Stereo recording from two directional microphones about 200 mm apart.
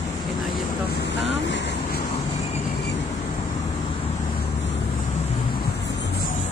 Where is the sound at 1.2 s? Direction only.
60° left (ahead or behind).